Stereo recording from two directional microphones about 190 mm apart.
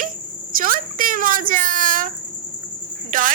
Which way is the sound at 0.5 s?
45° right (ahead or behind).